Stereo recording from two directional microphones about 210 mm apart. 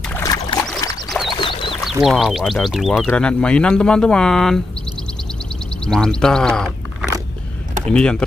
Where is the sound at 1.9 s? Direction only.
Centre (ahead or behind).